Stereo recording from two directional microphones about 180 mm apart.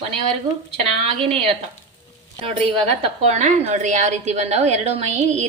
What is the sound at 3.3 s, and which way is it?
A woman's voice, 40° right (ahead or behind).